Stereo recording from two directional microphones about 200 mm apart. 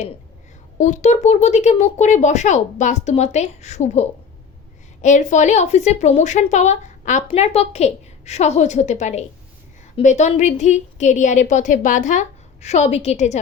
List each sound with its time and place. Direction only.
0.8 s a woman's voice: 35° left (ahead or behind)